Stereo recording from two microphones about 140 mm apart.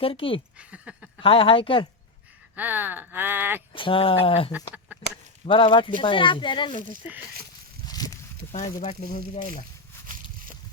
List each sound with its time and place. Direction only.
0.0 s speech: 40° left (ahead or behind)
0.6 s a sound: 10° right (ahead or behind)
1.2 s speech: 40° left (ahead or behind)
2.6 s speech: 10° right (ahead or behind)
3.7 s speech: 35° left (ahead or behind)
7.9 s a sound: 25° left (ahead or behind)
8.5 s speech: 55° left (ahead or behind)